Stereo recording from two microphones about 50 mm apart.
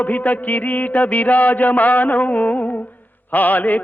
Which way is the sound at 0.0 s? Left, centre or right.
Left.